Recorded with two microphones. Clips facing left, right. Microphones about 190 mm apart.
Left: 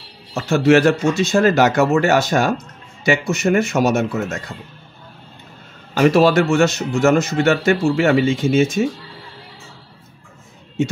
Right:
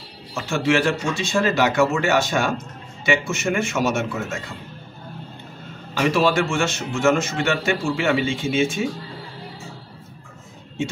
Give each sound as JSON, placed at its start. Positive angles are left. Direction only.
{"t": 0.3, "sound": "speech", "side_deg": 40}
{"t": 5.9, "sound": "speech", "side_deg": 40}